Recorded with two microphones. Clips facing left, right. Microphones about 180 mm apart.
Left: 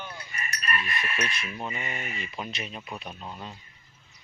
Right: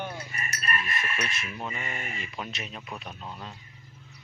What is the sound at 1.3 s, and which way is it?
Speech, centre (ahead or behind).